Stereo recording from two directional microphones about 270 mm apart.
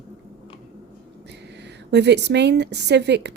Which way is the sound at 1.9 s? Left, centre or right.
Right.